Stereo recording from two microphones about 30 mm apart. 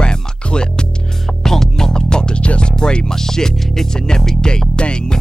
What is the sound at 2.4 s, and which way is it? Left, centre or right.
Music, left.